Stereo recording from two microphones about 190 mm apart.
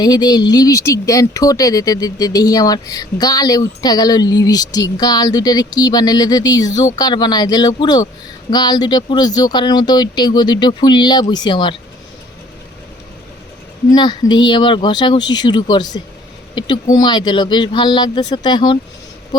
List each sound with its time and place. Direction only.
0.0 s speech: 20° left (ahead or behind)
13.9 s speech: 25° left (ahead or behind)